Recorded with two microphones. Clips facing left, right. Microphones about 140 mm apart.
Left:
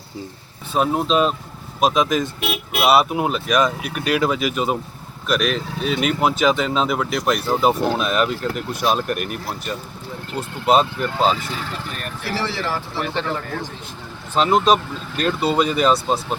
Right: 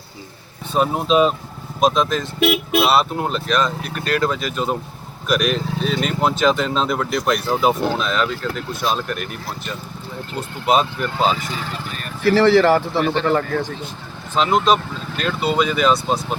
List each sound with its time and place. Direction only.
0.7 s speech: centre (ahead or behind)
1.8 s speech: 10° left (ahead or behind)
10.7 s speech: centre (ahead or behind)
12.2 s speech: 55° right (ahead or behind)
14.3 s speech: 5° left (ahead or behind)
15.6 s speech: 35° left (ahead or behind)